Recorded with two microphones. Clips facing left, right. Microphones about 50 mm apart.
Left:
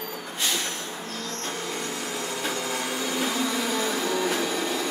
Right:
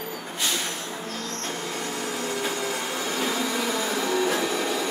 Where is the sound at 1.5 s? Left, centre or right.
Right.